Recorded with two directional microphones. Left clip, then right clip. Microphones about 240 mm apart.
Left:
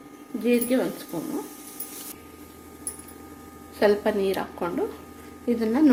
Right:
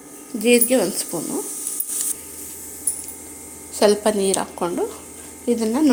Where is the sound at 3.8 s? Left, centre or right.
Right.